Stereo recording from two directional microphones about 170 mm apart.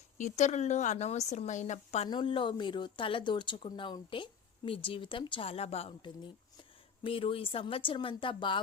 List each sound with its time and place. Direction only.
0.2 s a woman's voice: 45° left (ahead or behind)
2.0 s speech: 30° left (ahead or behind)